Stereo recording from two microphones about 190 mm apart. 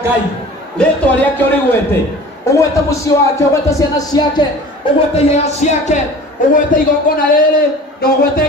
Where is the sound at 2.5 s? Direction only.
15° left (ahead or behind).